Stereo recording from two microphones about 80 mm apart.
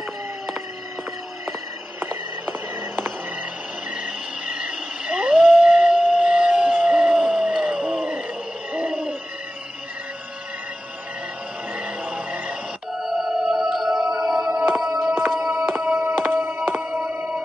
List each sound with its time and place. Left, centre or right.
3.9 s howl: centre
8.7 s hoot: centre
11.7 s music: centre
14.9 s music: right